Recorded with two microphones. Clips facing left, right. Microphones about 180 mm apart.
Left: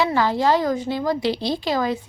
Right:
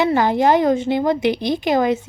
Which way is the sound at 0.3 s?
20° right (ahead or behind).